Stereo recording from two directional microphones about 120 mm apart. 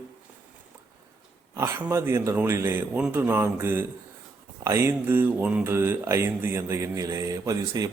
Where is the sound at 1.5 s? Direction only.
20° right (ahead or behind).